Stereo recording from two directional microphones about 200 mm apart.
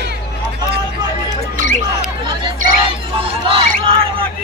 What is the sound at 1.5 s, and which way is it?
Music, 40° right (ahead or behind).